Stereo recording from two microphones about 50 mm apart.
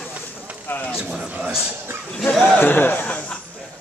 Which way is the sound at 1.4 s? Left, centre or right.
Centre.